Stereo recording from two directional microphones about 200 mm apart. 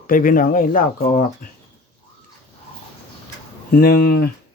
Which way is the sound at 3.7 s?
50° left (ahead or behind).